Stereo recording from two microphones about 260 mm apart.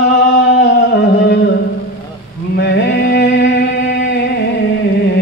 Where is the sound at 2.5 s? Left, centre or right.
Left.